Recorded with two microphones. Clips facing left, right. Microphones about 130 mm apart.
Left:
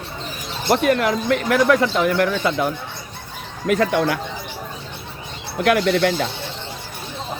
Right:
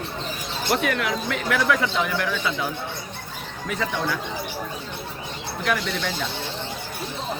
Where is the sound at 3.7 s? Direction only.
75° left (ahead or behind).